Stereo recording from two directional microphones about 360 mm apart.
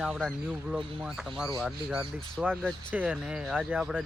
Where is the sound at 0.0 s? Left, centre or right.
Centre.